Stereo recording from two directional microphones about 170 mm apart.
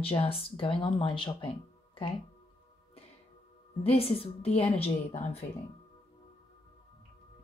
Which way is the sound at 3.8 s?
35° left (ahead or behind).